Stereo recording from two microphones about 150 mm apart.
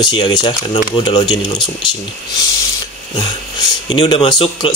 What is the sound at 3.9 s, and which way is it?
Speech, 40° left (ahead or behind).